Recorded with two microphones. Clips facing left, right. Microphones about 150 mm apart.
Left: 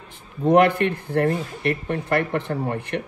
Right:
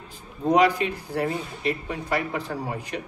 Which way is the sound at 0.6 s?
60° left (ahead or behind).